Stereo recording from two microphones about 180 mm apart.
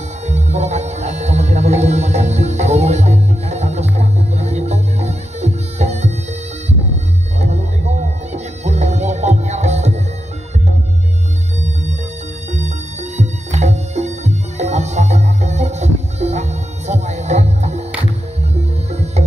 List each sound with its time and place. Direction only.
0.3 s music: 40° right (ahead or behind)
7.3 s music: 40° right (ahead or behind)
13.2 s music: 40° right (ahead or behind)